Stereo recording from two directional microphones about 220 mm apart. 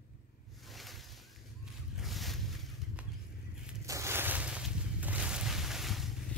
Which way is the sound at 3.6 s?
15° right (ahead or behind).